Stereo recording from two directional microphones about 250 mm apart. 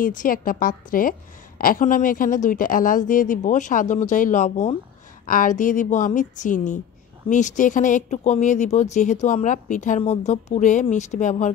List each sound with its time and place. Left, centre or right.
0.0 s speech: left